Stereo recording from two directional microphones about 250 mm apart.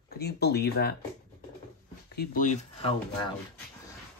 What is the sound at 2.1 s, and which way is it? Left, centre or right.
Speech, left.